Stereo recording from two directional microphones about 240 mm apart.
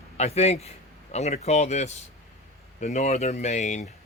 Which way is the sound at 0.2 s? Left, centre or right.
Left.